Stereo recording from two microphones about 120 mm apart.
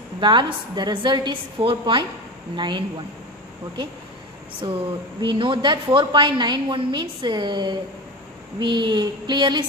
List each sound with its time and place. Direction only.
0.2 s a woman's voice: 40° right (ahead or behind)
4.6 s a woman's voice: 35° right (ahead or behind)